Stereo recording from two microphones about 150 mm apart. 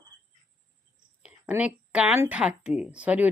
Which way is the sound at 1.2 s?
10° right (ahead or behind).